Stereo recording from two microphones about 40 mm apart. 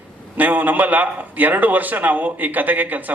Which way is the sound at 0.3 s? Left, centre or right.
Right.